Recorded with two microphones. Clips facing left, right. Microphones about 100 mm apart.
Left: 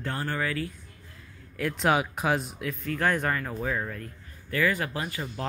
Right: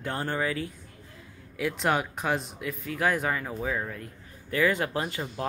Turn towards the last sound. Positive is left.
turn(degrees=-25)  # may be behind; listen again after turning